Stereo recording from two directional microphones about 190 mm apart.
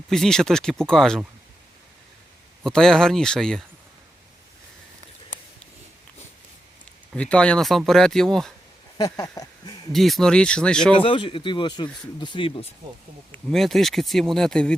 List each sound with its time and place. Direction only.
0.1 s speech: centre (ahead or behind)
2.6 s speech: 5° left (ahead or behind)
7.1 s speech: 5° left (ahead or behind)
9.0 s a sound: 20° left (ahead or behind)
9.9 s speech: centre (ahead or behind)
11.0 s speech: 25° left (ahead or behind)
13.3 s speech: centre (ahead or behind)